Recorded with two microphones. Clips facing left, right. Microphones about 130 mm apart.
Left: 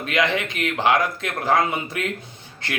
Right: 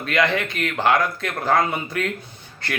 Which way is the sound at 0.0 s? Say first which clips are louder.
Right 1 dB; 20° left (ahead or behind).